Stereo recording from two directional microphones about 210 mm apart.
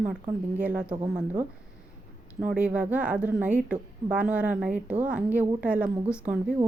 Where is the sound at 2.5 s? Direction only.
5° right (ahead or behind).